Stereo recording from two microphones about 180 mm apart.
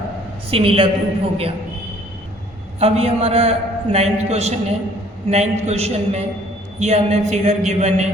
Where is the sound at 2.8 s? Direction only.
35° right (ahead or behind).